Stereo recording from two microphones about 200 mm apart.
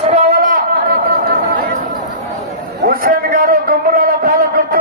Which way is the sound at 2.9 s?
45° right (ahead or behind).